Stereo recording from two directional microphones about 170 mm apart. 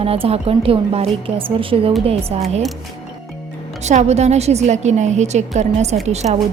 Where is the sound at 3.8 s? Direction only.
40° right (ahead or behind).